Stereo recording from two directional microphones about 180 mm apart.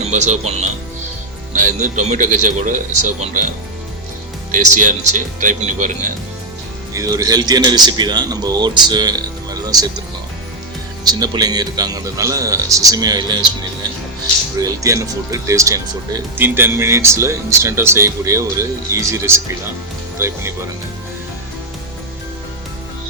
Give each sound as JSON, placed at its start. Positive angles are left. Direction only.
{"t": 0.0, "sound": "speech", "side_deg": -40}
{"t": 4.5, "sound": "speech", "side_deg": -45}
{"t": 6.9, "sound": "a man's voice", "side_deg": -20}
{"t": 11.0, "sound": "a man's voice", "side_deg": -20}
{"t": 14.6, "sound": "speech", "side_deg": -20}